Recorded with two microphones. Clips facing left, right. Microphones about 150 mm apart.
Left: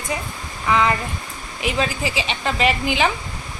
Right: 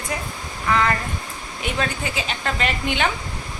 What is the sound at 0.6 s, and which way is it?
Speech, 5° left (ahead or behind).